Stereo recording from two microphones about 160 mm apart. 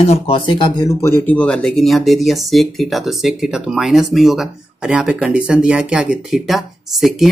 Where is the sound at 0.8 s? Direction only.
15° left (ahead or behind).